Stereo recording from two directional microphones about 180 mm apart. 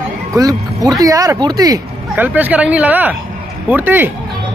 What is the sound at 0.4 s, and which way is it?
Speech, 20° right (ahead or behind).